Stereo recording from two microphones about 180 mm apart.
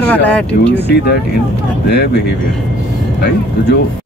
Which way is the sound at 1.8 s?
65° left (ahead or behind).